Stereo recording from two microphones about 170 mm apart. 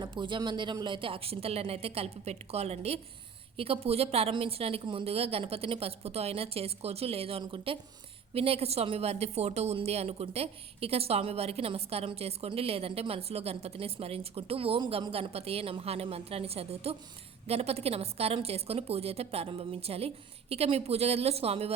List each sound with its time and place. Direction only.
0.0 s a woman's voice: 30° right (ahead or behind)